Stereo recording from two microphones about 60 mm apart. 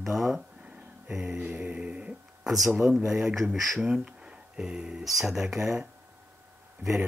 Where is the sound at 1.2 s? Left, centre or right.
Right.